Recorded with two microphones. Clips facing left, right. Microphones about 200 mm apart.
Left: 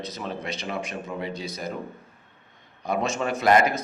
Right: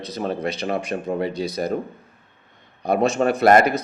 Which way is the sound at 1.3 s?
70° right (ahead or behind).